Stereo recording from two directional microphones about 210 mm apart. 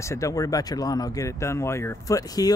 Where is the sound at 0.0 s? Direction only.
15° left (ahead or behind).